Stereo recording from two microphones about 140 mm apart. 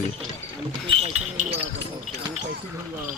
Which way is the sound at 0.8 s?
40° right (ahead or behind).